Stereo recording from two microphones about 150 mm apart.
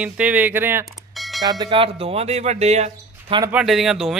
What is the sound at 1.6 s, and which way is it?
Speech, 35° right (ahead or behind).